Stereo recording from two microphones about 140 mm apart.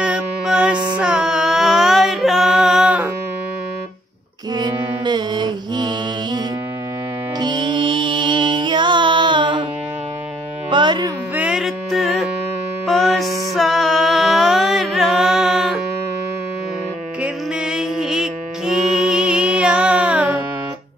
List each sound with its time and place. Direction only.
0.0 s music: 5° right (ahead or behind)
5.0 s mantra: 30° right (ahead or behind)
7.3 s music: 30° right (ahead or behind)
10.7 s music: 35° right (ahead or behind)
11.3 s music: 5° right (ahead or behind)
17.2 s music: 5° right (ahead or behind)